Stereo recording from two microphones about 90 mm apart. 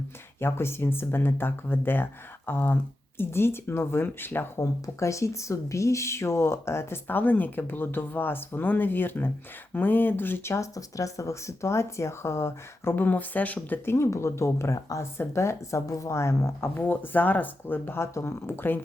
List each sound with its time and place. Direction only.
0.3 s speech: 25° left (ahead or behind)
4.6 s speech: 35° left (ahead or behind)